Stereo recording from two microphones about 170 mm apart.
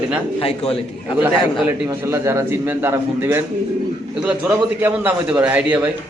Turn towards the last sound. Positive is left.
turn(degrees=-10)  # may be behind; listen again after turning